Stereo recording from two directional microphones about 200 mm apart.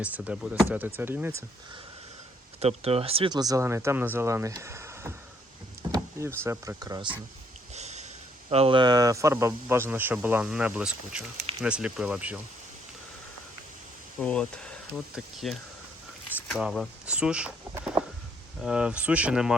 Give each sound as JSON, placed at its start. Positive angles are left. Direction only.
{"t": 0.0, "sound": "speech", "side_deg": -5}
{"t": 2.6, "sound": "speech", "side_deg": -30}
{"t": 7.7, "sound": "a sound", "side_deg": -35}
{"t": 8.4, "sound": "speech", "side_deg": -30}
{"t": 14.2, "sound": "speech", "side_deg": 5}